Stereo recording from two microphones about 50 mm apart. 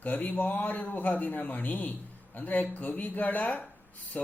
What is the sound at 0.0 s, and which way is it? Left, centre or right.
A man's voice, left.